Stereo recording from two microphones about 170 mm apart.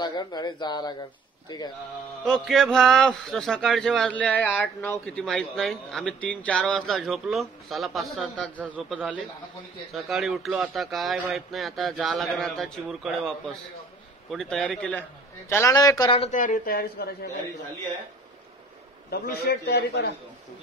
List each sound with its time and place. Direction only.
0.0 s speech: 25° left (ahead or behind)
2.2 s speech: 5° left (ahead or behind)
15.5 s speech: 20° left (ahead or behind)
16.2 s a woman's voice: 45° left (ahead or behind)
19.0 s a man's voice: 65° left (ahead or behind)